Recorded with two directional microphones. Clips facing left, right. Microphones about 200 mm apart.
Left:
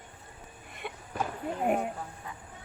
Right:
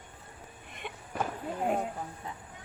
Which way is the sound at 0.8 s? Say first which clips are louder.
Even; 5° left (ahead or behind).